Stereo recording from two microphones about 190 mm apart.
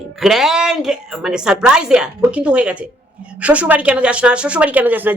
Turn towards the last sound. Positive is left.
turn(degrees=-10)  # may be behind; listen again after turning